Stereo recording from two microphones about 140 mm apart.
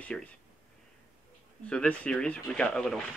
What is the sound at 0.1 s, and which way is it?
Speech, 5° left (ahead or behind).